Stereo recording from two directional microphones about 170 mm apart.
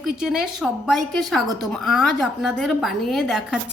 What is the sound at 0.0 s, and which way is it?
A woman's voice, 5° right (ahead or behind).